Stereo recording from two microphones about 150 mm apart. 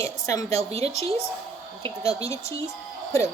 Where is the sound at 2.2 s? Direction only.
20° left (ahead or behind).